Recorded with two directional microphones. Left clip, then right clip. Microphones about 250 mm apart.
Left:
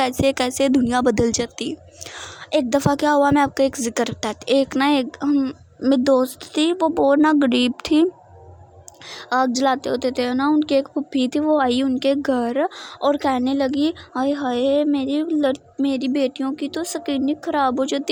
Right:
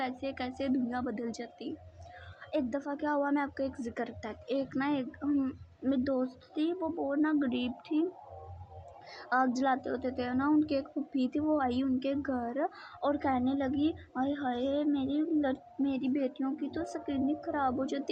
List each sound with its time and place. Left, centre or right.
0.0 s a woman's voice: left
9.0 s a woman's voice: left